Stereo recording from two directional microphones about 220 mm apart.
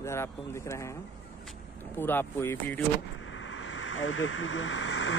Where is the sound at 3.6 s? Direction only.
65° left (ahead or behind).